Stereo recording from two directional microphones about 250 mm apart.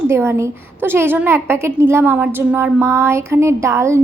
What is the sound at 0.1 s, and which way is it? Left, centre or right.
A woman's voice, centre.